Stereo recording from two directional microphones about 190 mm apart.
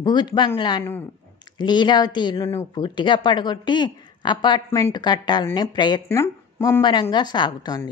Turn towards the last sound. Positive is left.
turn(degrees=20)  # may be behind; listen again after turning